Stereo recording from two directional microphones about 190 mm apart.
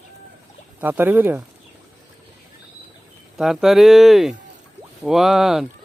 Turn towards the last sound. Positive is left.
turn(degrees=0)  # may be behind; listen again after turning